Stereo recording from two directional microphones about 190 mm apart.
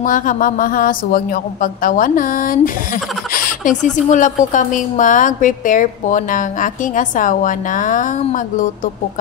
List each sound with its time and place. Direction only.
0.0 s a woman's voice: 45° left (ahead or behind)